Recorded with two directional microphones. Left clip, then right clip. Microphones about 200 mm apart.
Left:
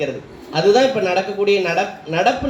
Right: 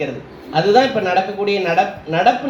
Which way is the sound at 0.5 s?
45° left (ahead or behind).